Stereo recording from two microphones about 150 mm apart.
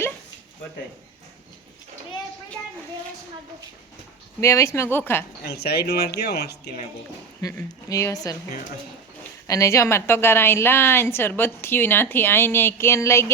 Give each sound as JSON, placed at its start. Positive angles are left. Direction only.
{"t": 4.4, "sound": "a woman's voice", "side_deg": 20}
{"t": 5.4, "sound": "speech", "side_deg": 90}
{"t": 7.9, "sound": "a woman's voice", "side_deg": 20}
{"t": 9.5, "sound": "a woman's voice", "side_deg": 20}